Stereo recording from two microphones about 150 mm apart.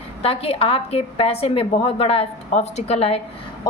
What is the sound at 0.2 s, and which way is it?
A woman's voice, 40° left (ahead or behind).